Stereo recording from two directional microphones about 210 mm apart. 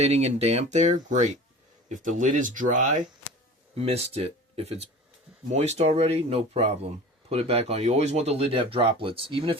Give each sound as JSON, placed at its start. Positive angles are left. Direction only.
{"t": 0.0, "sound": "speech", "side_deg": -30}